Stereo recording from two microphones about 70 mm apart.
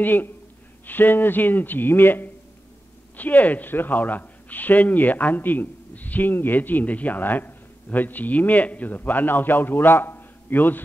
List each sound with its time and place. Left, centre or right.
0.0 s a man's voice: left